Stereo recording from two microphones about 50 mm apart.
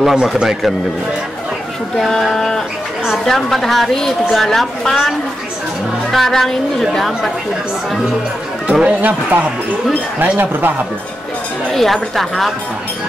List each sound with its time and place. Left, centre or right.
0.0 s a man's voice: centre
2.0 s a woman's voice: centre
6.1 s a woman's voice: centre
8.8 s speech: right
11.7 s a woman's voice: centre